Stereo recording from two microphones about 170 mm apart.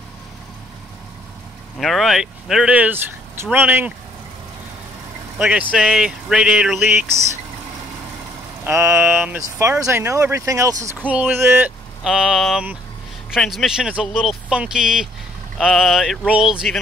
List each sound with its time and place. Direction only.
1.8 s speech: centre (ahead or behind)
5.4 s speech: 5° right (ahead or behind)
8.6 s speech: 15° right (ahead or behind)
12.0 s speech: 5° right (ahead or behind)